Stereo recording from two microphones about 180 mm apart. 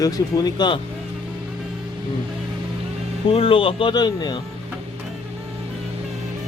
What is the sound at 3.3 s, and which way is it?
Speech, 30° left (ahead or behind).